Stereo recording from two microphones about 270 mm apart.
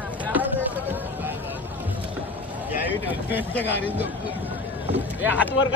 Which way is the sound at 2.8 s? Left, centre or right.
Centre.